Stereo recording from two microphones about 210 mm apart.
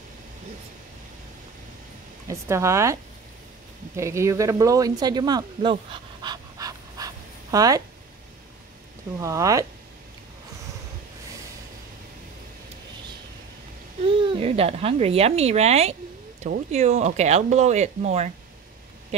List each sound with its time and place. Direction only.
2.2 s speech: 15° right (ahead or behind)
9.2 s speech: 15° right (ahead or behind)
14.0 s speech: 25° right (ahead or behind)